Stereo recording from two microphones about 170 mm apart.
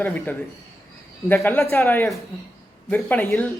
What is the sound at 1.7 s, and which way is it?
Speech, 15° left (ahead or behind).